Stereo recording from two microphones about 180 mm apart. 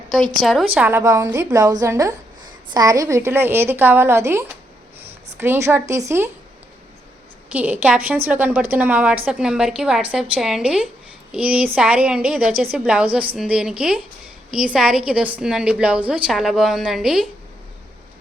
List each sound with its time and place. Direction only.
0.7 s a woman's voice: 10° right (ahead or behind)
7.5 s a woman's voice: 10° right (ahead or behind)